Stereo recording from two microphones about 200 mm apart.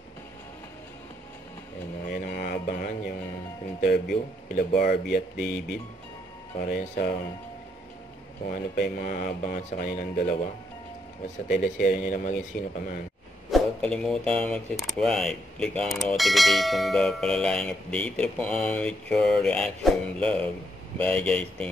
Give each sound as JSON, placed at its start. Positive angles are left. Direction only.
{"t": 2.0, "sound": "a sound", "side_deg": 45}
{"t": 3.9, "sound": "speech", "side_deg": 50}
{"t": 5.4, "sound": "speech", "side_deg": 0}
{"t": 6.6, "sound": "speech", "side_deg": 45}
{"t": 8.5, "sound": "speech", "side_deg": 45}
{"t": 11.5, "sound": "speech", "side_deg": 40}
{"t": 13.5, "sound": "speech", "side_deg": 0}